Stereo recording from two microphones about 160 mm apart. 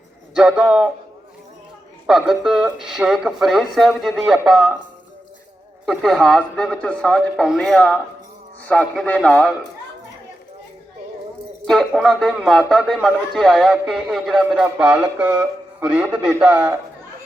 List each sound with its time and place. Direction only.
0.3 s a man's voice: 5° right (ahead or behind)
2.0 s a man's voice: centre (ahead or behind)
5.8 s a man's voice: centre (ahead or behind)
11.6 s a man's voice: centre (ahead or behind)